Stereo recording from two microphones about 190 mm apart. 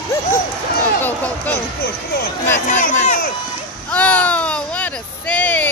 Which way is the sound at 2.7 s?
45° left (ahead or behind).